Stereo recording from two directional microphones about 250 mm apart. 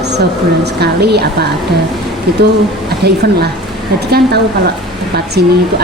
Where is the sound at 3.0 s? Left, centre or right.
Right.